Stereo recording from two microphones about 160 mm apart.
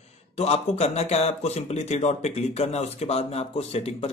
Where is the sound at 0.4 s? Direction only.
40° left (ahead or behind).